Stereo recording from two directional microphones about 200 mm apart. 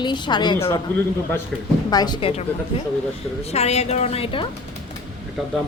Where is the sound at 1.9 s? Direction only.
20° left (ahead or behind).